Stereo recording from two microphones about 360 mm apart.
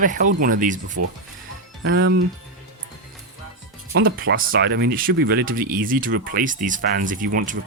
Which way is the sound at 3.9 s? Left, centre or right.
Right.